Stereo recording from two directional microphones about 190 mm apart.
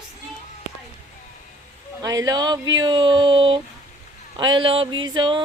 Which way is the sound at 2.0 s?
20° right (ahead or behind).